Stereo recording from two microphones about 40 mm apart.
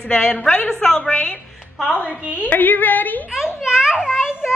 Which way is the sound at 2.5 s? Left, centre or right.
Left.